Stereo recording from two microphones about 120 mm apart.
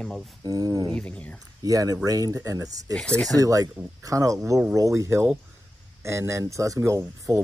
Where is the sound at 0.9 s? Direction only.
10° left (ahead or behind).